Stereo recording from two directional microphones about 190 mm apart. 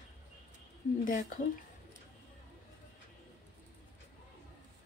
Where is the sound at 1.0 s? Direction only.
45° left (ahead or behind).